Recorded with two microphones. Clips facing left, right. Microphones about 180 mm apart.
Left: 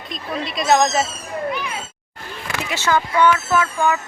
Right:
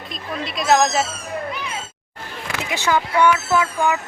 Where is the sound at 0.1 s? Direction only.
Centre (ahead or behind).